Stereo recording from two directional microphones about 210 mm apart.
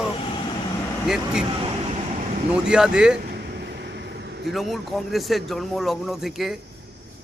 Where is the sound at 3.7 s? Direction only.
50° right (ahead or behind).